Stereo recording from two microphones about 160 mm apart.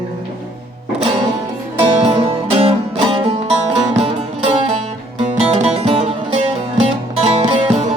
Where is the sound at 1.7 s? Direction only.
40° right (ahead or behind).